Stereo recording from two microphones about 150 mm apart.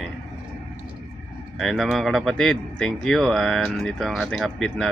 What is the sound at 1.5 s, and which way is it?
Speech, centre (ahead or behind).